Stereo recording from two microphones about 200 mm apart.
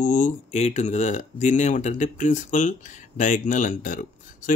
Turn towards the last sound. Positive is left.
turn(degrees=40)  # may be behind; listen again after turning